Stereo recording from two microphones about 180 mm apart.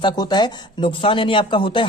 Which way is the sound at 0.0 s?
25° left (ahead or behind).